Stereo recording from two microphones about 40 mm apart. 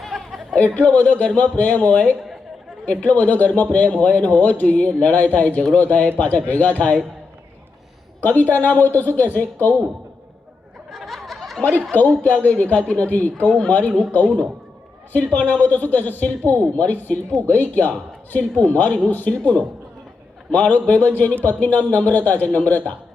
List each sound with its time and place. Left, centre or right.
0.0 s a sound: centre
0.6 s a man's voice: left
3.2 s a man's voice: left
8.2 s a man's voice: left
10.9 s a sound: centre
11.9 s a man's voice: left